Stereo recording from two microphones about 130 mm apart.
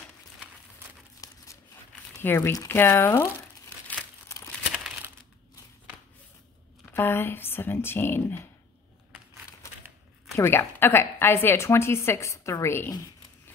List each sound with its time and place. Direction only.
1.2 s crumpling: 25° left (ahead or behind)
2.2 s a woman's voice: 15° left (ahead or behind)
6.9 s speech: 15° left (ahead or behind)
10.3 s a woman's voice: 20° left (ahead or behind)